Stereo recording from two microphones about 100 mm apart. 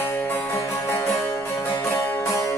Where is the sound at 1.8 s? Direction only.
30° left (ahead or behind).